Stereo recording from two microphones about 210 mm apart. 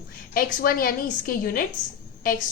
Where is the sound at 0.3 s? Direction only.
45° left (ahead or behind).